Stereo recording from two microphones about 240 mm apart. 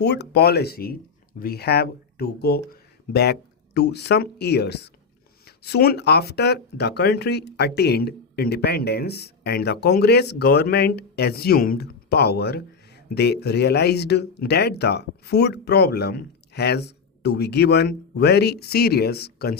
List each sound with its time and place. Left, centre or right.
0.0 s speech: left